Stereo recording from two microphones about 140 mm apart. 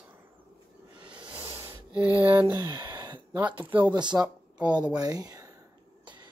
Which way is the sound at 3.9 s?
30° right (ahead or behind).